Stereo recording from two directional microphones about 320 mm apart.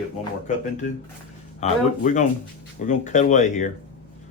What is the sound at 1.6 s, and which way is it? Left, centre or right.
Speech, left.